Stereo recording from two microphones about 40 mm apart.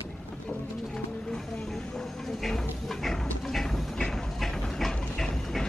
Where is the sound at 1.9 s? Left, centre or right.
Centre.